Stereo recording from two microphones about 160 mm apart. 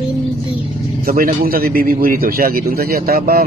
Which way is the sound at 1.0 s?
65° right (ahead or behind).